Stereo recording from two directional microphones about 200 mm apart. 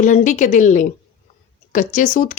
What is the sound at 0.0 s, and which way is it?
A woman's voice, 40° left (ahead or behind).